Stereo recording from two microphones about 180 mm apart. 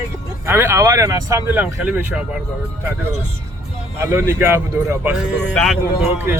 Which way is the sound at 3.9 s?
15° right (ahead or behind).